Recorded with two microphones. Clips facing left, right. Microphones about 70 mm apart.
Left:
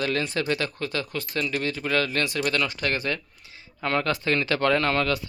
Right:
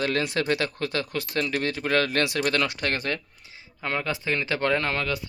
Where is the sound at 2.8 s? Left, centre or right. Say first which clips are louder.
Left 1 dB; right.